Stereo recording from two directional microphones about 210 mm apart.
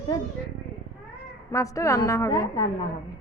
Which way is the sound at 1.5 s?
15° left (ahead or behind).